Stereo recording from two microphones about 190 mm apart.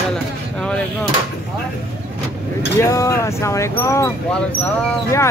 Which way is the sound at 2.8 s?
15° left (ahead or behind).